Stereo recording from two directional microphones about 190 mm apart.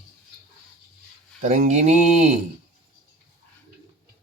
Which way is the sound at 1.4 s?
40° right (ahead or behind).